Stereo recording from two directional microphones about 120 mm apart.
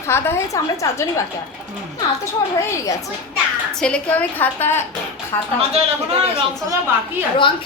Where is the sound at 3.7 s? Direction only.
10° left (ahead or behind).